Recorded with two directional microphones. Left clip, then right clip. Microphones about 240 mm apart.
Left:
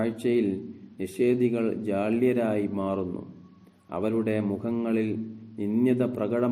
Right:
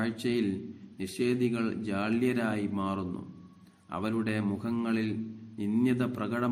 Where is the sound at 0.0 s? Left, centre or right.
Right.